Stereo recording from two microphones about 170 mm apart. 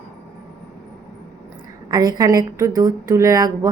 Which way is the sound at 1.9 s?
20° right (ahead or behind).